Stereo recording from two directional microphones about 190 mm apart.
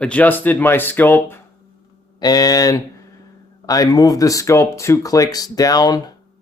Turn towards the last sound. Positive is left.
turn(degrees=20)  # may be behind; listen again after turning